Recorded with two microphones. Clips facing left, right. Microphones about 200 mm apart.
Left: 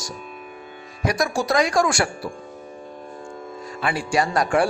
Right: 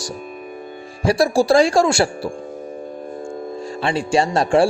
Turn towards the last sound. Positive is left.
turn(degrees=-25)  # may be behind; listen again after turning